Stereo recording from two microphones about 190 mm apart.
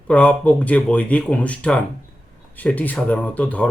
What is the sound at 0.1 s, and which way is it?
Speech, 5° left (ahead or behind).